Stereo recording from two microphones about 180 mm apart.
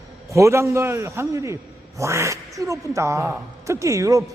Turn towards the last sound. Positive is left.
turn(degrees=-15)  # may be behind; listen again after turning